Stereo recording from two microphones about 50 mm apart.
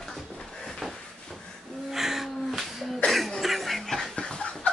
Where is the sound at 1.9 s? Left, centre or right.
Centre.